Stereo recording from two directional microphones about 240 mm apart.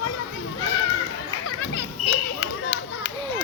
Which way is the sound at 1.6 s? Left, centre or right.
Left.